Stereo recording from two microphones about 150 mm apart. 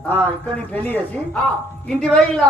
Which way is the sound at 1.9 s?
5° left (ahead or behind).